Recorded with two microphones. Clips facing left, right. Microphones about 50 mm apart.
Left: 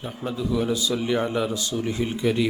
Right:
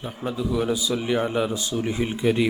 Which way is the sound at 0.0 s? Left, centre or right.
Centre.